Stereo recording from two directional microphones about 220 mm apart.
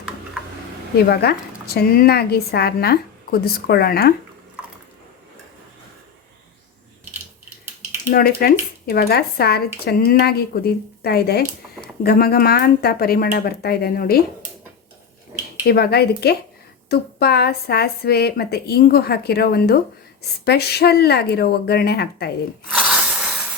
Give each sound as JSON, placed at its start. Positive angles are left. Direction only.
{"t": 1.1, "sound": "speech", "side_deg": 45}
{"t": 8.4, "sound": "speech", "side_deg": 45}
{"t": 15.6, "sound": "speech", "side_deg": 45}
{"t": 22.7, "sound": "a sound", "side_deg": -5}